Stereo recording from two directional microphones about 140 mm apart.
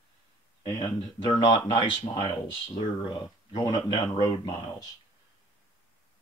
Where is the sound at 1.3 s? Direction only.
40° left (ahead or behind).